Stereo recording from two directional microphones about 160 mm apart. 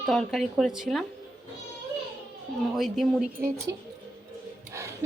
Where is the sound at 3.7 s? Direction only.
20° right (ahead or behind).